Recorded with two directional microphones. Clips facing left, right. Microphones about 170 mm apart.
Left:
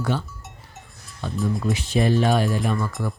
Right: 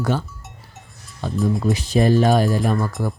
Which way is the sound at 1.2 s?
40° right (ahead or behind).